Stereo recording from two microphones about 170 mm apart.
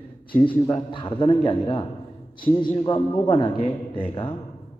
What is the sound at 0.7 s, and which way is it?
A man's voice, 30° left (ahead or behind).